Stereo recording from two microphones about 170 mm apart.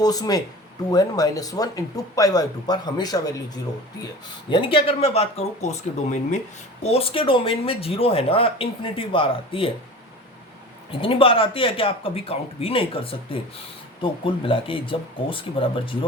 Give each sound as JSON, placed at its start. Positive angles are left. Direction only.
{"t": 0.0, "sound": "speech", "side_deg": 20}
{"t": 4.4, "sound": "speech", "side_deg": 30}
{"t": 11.0, "sound": "speech", "side_deg": 30}